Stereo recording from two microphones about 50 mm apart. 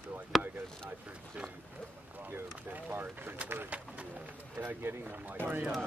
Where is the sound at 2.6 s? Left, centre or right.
Right.